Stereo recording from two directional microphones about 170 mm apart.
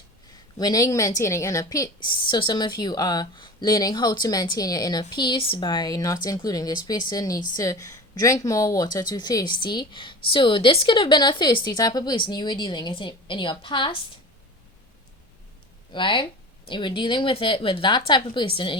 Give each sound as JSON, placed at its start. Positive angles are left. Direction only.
{"t": 0.6, "sound": "speech", "side_deg": 20}
{"t": 15.9, "sound": "speech", "side_deg": 30}